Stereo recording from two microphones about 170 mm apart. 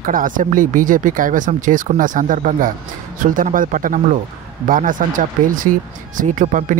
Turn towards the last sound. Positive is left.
turn(degrees=-50)  # may be behind; listen again after turning